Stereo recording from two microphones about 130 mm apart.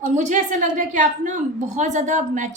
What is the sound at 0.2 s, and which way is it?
A woman's voice, 65° right (ahead or behind).